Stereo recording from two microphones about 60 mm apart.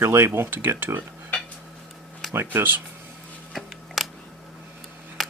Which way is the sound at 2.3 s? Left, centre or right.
Right.